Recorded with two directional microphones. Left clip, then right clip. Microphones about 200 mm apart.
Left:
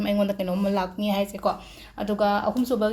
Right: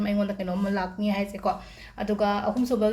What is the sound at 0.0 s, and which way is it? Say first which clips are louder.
Speech: left 4 dB; 35° left (ahead or behind).